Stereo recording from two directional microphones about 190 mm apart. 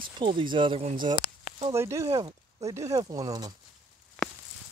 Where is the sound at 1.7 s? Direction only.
15° right (ahead or behind).